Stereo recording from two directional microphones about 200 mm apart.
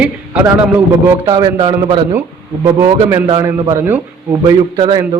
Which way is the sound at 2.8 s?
15° right (ahead or behind).